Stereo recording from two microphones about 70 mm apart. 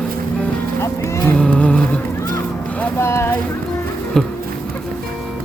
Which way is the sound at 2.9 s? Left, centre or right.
Left.